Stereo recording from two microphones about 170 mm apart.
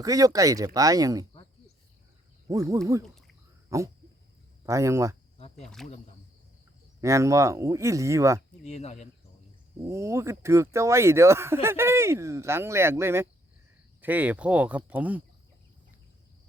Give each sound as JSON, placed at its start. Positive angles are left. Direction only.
{"t": 0.0, "sound": "speech", "side_deg": -20}
{"t": 2.5, "sound": "speech", "side_deg": -20}
{"t": 3.7, "sound": "a sound", "side_deg": -20}
{"t": 4.6, "sound": "speech", "side_deg": -20}
{"t": 5.6, "sound": "speech", "side_deg": 0}
{"t": 7.0, "sound": "speech", "side_deg": -15}
{"t": 8.6, "sound": "speech", "side_deg": 40}
{"t": 9.8, "sound": "speech", "side_deg": -15}